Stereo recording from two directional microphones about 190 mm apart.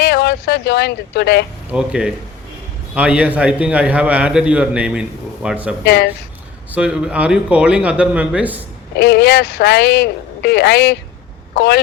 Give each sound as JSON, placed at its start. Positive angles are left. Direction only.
{"t": 0.0, "sound": "speech", "side_deg": 60}
{"t": 1.7, "sound": "a man's voice", "side_deg": -5}
{"t": 5.8, "sound": "a man's voice", "side_deg": 60}
{"t": 6.7, "sound": "a man's voice", "side_deg": -5}
{"t": 9.0, "sound": "a man's voice", "side_deg": 60}